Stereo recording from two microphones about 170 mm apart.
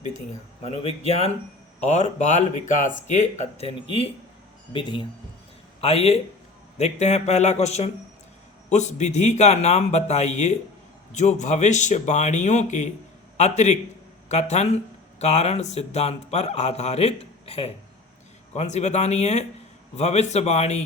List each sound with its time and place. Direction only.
0.6 s a man's voice: 35° left (ahead or behind)